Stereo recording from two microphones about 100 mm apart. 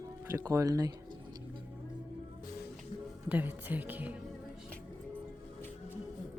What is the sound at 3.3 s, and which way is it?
Speech, 15° right (ahead or behind).